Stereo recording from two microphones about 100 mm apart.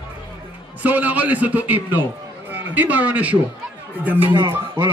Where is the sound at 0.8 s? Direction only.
15° right (ahead or behind).